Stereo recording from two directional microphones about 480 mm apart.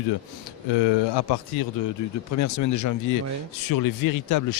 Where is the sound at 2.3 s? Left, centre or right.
Left.